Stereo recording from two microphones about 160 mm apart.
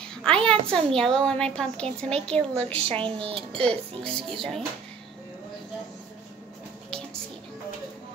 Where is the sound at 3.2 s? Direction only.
35° right (ahead or behind).